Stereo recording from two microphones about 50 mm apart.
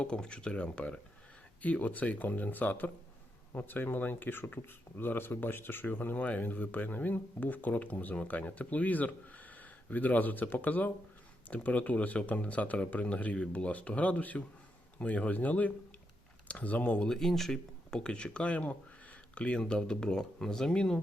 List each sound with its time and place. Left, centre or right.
0.0 s speech: centre
17.1 s speech: centre
18.0 s speech: centre